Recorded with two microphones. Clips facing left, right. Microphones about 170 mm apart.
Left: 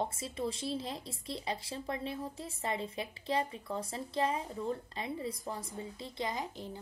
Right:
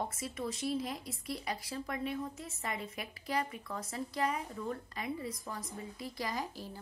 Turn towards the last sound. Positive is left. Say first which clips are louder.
# even
turn(degrees=20)  # may be behind; listen again after turning